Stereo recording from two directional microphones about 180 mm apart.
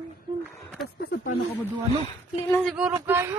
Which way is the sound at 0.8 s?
60° left (ahead or behind).